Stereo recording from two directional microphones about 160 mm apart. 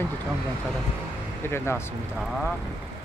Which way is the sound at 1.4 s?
15° left (ahead or behind).